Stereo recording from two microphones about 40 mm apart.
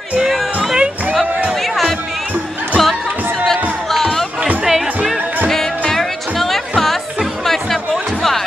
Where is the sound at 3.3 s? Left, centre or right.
Centre.